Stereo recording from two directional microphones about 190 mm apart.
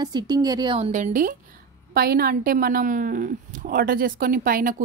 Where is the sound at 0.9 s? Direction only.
45° right (ahead or behind).